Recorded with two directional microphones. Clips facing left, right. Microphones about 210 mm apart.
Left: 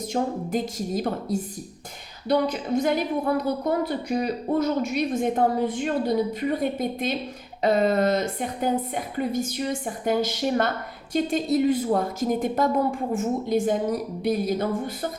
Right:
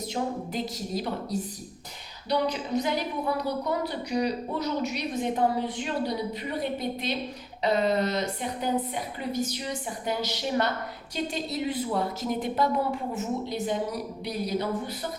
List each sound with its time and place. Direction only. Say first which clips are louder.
0.1 s a woman's voice: left 6 dB; 50° left (ahead or behind)